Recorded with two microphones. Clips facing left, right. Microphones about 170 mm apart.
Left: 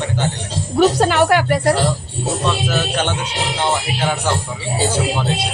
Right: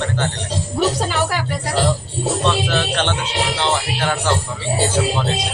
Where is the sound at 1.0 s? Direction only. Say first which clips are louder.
Left 7 dB; 65° left (ahead or behind).